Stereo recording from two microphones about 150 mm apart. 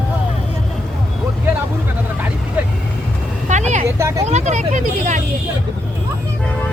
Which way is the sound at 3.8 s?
20° right (ahead or behind).